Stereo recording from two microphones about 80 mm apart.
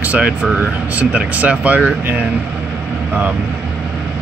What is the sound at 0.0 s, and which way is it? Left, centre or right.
Speech, centre.